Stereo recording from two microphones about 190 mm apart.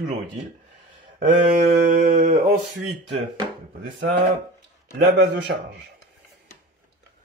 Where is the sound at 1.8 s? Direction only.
45° right (ahead or behind).